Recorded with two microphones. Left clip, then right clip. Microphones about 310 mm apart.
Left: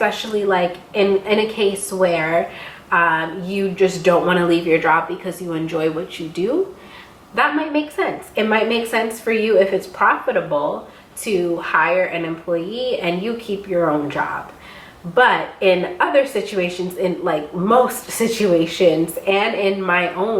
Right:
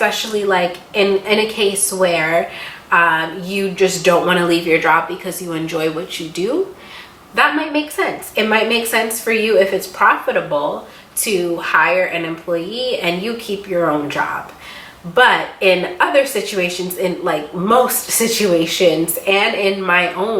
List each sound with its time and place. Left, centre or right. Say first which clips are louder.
0.0 s a woman's voice: right 2 dB; centre
7.5 s a woman's voice: right 2 dB; centre
10.5 s speech: right 1 dB; left
11.2 s a woman's voice: right 2 dB; centre
17.5 s speech: right 1 dB; centre
18.1 s a woman's voice: right 2 dB; centre